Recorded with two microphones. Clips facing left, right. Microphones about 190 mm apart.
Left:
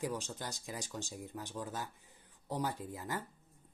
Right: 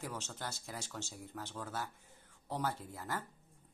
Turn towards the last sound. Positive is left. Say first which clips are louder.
# left 1 dB
turn(degrees=15)  # may be behind; listen again after turning